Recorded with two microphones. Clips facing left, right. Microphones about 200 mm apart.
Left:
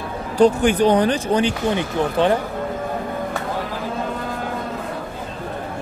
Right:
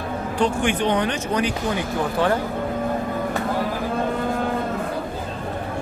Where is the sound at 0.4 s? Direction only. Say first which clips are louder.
Left 7 dB; 40° left (ahead or behind); by 2.3 s 20° left (ahead or behind).